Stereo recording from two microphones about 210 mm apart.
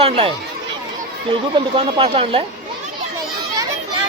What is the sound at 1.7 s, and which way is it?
Speech, 25° right (ahead or behind).